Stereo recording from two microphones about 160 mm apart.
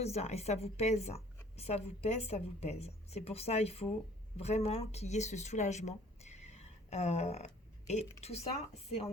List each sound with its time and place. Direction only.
0.0 s a woman's voice: 40° left (ahead or behind)